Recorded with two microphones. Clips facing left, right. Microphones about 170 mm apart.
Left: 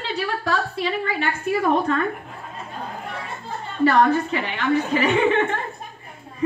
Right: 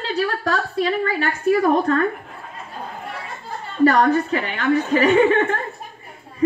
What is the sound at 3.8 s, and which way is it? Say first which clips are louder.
A woman's voice: right 2 dB; 40° right (ahead or behind).